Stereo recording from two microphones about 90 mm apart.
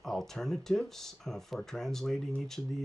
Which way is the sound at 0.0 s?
5° left (ahead or behind).